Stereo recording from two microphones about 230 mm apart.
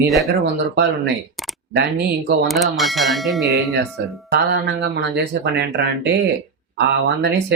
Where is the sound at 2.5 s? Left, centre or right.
Centre.